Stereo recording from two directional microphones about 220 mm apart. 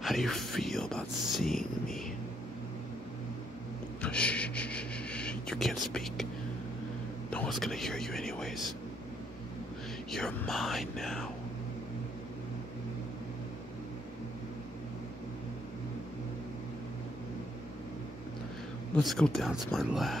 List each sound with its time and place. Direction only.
0.0 s speech: centre (ahead or behind)
4.0 s a sound: 5° left (ahead or behind)
7.2 s speech: 5° left (ahead or behind)
10.1 s speech: 5° left (ahead or behind)
19.0 s speech: centre (ahead or behind)